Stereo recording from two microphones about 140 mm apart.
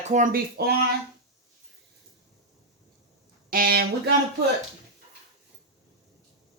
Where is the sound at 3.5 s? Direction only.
90° right.